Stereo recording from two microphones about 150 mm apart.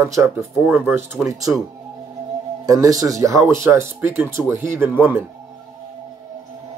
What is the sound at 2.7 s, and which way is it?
Speech, 25° right (ahead or behind).